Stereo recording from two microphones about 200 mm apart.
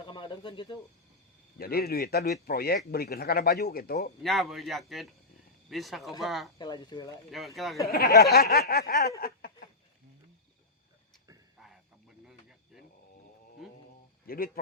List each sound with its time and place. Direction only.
0.0 s bird: 25° left (ahead or behind)
1.5 s speech: 50° left (ahead or behind)
4.2 s a man's voice: centre (ahead or behind)
6.6 s speech: 20° left (ahead or behind)
7.3 s a man's voice: centre (ahead or behind)
7.9 s speech: 50° left (ahead or behind)
11.6 s a sound: centre (ahead or behind)
14.3 s speech: 45° left (ahead or behind)